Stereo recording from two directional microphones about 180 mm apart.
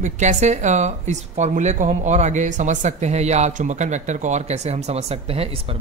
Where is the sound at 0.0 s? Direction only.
40° right (ahead or behind).